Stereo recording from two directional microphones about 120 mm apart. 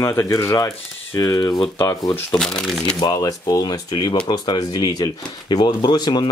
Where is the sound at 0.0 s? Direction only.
25° left (ahead or behind).